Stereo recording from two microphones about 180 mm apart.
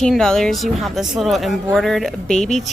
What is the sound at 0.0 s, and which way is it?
A woman's voice, 5° left (ahead or behind).